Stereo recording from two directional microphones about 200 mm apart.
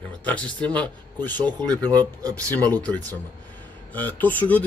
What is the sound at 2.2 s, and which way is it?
Speech, 15° right (ahead or behind).